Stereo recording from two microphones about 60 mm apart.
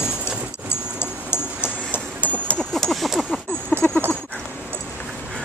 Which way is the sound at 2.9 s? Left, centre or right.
Centre.